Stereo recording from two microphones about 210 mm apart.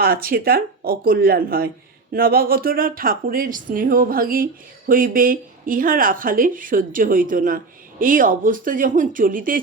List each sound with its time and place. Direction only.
0.0 s speech: 45° right (ahead or behind)